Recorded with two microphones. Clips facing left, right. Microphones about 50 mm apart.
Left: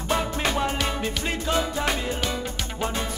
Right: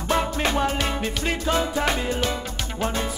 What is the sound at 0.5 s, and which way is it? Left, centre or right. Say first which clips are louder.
Music: right 2 dB; centre.